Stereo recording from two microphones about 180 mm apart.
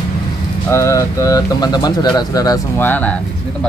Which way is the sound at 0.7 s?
15° left (ahead or behind).